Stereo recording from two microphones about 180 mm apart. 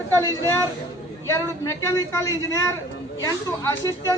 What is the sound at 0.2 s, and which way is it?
Speech, 15° left (ahead or behind).